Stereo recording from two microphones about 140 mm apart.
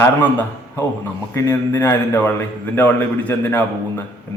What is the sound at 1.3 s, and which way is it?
A man's voice, 20° left (ahead or behind).